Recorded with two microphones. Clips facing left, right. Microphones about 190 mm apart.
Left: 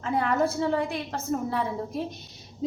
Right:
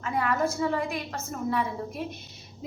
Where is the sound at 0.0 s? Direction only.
30° left (ahead or behind).